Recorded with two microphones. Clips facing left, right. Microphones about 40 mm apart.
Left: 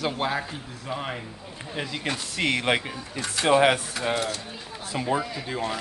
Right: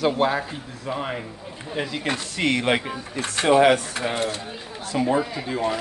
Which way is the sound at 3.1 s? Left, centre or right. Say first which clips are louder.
Right 2 dB; right.